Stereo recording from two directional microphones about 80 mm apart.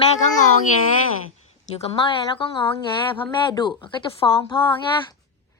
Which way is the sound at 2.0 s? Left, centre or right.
Left.